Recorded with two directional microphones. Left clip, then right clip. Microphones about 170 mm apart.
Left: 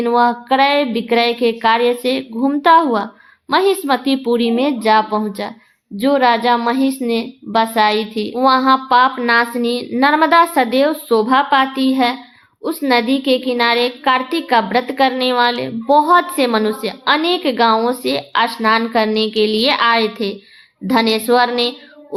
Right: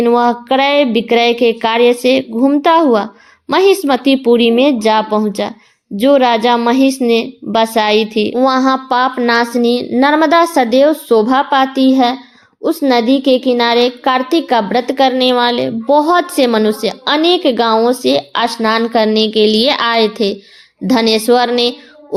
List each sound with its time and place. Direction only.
0.0 s a child's voice: 35° right (ahead or behind)